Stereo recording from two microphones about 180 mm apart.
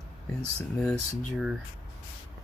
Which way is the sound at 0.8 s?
Centre (ahead or behind).